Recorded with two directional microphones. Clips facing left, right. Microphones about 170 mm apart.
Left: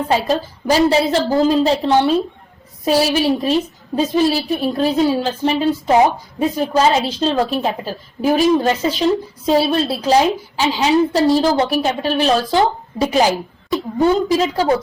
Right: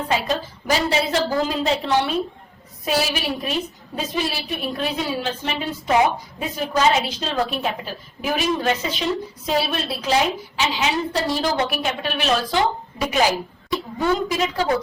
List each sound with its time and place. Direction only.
0.1 s a woman's voice: 35° left (ahead or behind)